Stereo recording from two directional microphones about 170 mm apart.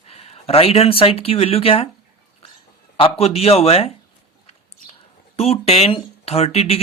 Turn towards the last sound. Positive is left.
turn(degrees=35)  # may be behind; listen again after turning